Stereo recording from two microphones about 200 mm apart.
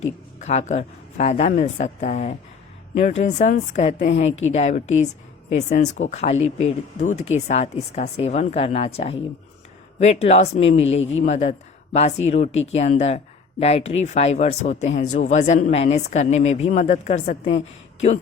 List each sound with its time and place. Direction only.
0.3 s speech: 35° left (ahead or behind)
4.3 s a woman's voice: 75° left (ahead or behind)
4.5 s speech: 35° left (ahead or behind)